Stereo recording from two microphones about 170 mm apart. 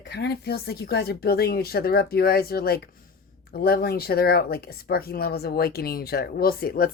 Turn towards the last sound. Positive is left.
turn(degrees=60)  # may be behind; listen again after turning